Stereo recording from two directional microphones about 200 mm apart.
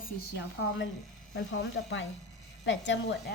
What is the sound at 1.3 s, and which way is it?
A woman's voice, 65° left (ahead or behind).